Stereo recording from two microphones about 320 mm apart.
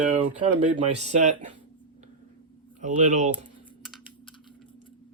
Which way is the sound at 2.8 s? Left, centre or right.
Right.